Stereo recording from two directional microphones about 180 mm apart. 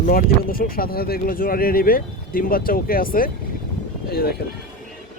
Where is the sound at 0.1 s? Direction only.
55° left (ahead or behind).